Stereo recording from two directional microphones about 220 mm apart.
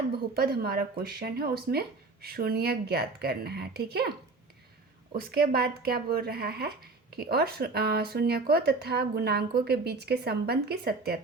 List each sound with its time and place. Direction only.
0.3 s speech: 45° right (ahead or behind)
5.1 s speech: 45° right (ahead or behind)